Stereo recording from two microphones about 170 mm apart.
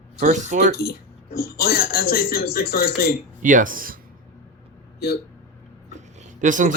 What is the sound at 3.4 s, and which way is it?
Speech, 50° right (ahead or behind).